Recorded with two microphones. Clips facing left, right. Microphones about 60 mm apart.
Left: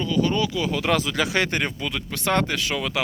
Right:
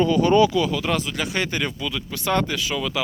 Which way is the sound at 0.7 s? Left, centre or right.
Left.